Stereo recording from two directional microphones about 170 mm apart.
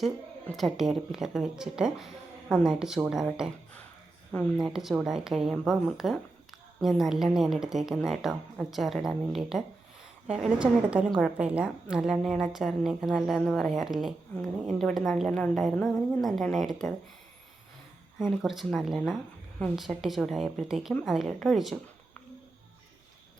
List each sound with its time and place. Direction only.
0.0 s a woman's voice: centre (ahead or behind)
18.2 s a woman's voice: centre (ahead or behind)